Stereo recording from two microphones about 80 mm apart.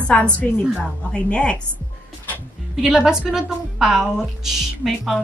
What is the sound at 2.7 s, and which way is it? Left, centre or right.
A woman's voice, centre.